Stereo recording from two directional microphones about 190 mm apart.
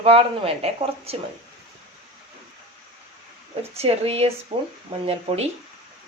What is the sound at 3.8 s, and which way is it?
Speech, 30° right (ahead or behind).